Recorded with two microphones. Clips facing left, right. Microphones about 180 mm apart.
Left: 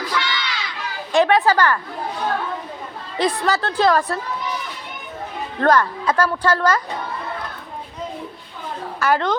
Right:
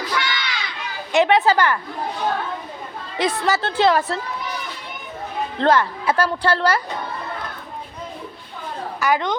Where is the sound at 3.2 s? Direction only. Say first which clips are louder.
Left 1 dB; 20° right (ahead or behind).